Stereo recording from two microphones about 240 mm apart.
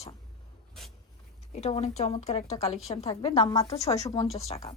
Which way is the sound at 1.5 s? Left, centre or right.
Left.